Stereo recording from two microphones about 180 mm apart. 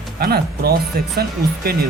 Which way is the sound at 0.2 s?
55° right (ahead or behind).